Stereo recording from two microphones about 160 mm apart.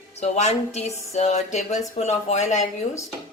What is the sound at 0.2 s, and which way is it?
A woman's voice, 45° left (ahead or behind).